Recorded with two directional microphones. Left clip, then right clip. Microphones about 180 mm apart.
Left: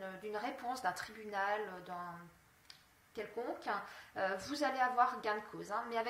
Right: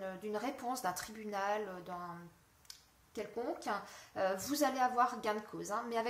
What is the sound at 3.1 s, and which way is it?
A woman's voice, 50° right (ahead or behind).